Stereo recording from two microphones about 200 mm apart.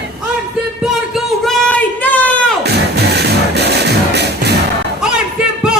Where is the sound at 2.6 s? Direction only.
55° right (ahead or behind).